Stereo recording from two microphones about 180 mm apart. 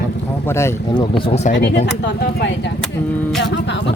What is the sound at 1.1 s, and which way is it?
Speech, 35° left (ahead or behind).